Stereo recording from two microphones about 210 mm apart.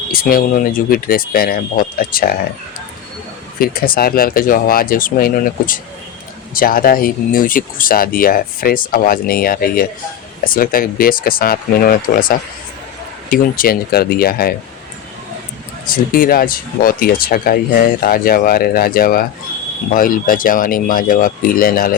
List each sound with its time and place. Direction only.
0.1 s speech: 45° left (ahead or behind)
3.6 s speech: 45° left (ahead or behind)
15.9 s speech: 40° left (ahead or behind)